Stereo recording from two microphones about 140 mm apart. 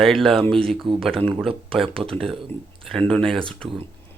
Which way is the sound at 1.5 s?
40° right (ahead or behind).